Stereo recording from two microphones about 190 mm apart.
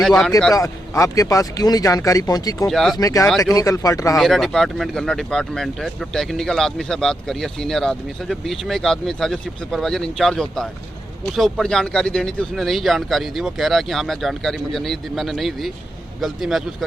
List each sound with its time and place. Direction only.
0.5 s speech: 15° left (ahead or behind)
2.6 s speech: centre (ahead or behind)
3.0 s speech: 20° left (ahead or behind)
3.2 s speech: centre (ahead or behind)
3.5 s speech: 20° left (ahead or behind)
4.2 s speech: centre (ahead or behind)